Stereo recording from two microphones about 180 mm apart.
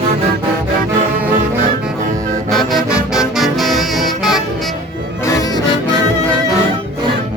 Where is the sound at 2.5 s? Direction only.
Centre (ahead or behind).